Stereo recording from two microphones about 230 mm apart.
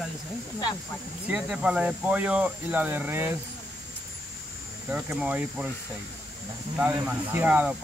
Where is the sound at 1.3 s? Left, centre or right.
Centre.